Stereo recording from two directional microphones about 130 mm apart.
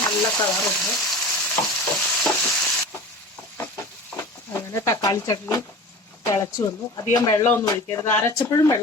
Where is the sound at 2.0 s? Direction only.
5° left (ahead or behind).